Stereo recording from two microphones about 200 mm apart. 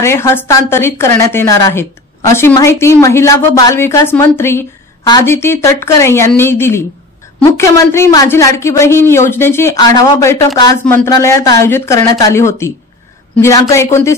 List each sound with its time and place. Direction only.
0.0 s a woman's voice: 15° left (ahead or behind)